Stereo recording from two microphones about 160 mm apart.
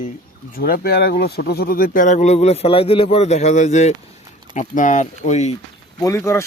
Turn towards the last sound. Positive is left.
turn(degrees=15)  # may be behind; listen again after turning